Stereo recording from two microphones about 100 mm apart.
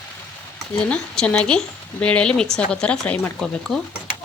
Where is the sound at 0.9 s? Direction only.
10° left (ahead or behind).